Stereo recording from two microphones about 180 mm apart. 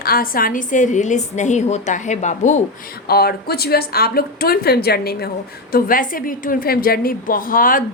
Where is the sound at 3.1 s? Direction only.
60° left (ahead or behind).